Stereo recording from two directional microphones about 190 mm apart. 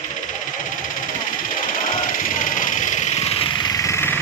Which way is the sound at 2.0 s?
45° left (ahead or behind).